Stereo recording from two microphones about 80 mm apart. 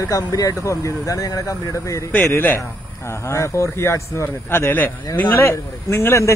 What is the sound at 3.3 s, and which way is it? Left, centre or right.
Speech, left.